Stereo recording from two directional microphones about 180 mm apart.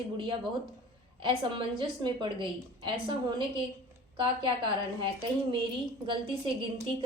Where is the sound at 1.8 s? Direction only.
25° right (ahead or behind).